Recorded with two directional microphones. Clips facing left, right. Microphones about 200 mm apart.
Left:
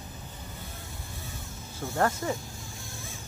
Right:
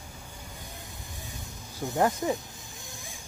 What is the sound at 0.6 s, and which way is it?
Snake, 15° right (ahead or behind).